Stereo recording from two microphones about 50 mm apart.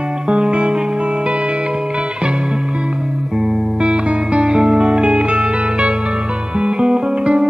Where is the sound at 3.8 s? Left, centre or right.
Centre.